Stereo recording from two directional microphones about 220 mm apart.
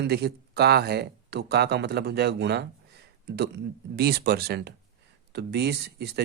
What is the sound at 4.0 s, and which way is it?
Speech, 45° right (ahead or behind).